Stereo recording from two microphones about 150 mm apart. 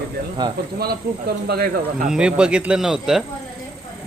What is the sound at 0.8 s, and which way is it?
Speech, 90° right.